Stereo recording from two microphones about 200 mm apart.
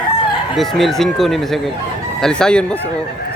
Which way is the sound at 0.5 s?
Centre (ahead or behind).